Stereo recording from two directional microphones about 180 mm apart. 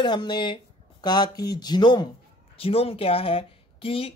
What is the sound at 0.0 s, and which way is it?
Speech, 25° left (ahead or behind).